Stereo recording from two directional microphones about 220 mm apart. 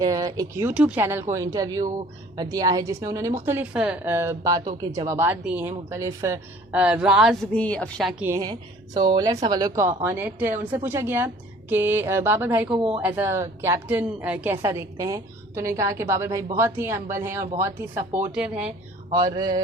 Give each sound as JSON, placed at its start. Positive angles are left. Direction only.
{"t": 0.0, "sound": "a woman's voice", "side_deg": -15}
{"t": 8.2, "sound": "a woman's voice", "side_deg": -15}
{"t": 12.7, "sound": "speech", "side_deg": -25}
{"t": 13.0, "sound": "a woman's voice", "side_deg": -5}
{"t": 19.1, "sound": "a woman's voice", "side_deg": -15}